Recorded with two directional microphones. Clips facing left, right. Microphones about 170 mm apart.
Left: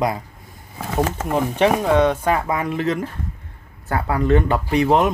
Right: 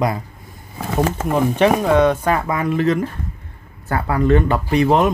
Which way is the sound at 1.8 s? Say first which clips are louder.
Right 2 dB; 25° left (ahead or behind).